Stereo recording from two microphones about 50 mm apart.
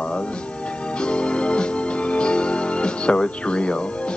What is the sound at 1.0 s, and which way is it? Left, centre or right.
Organ, left.